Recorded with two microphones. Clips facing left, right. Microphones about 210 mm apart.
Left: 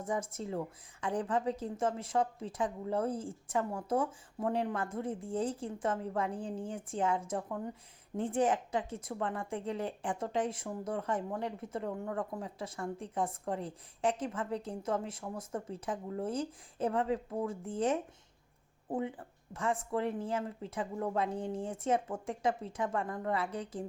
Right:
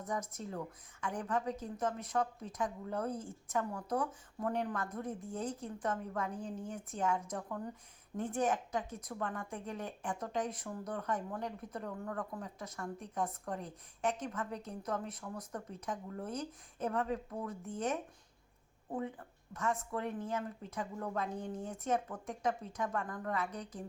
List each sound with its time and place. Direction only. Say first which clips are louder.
0.0 s speech: left 4 dB; 30° left (ahead or behind)